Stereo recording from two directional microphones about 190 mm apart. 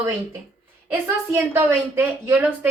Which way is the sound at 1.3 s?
10° right (ahead or behind).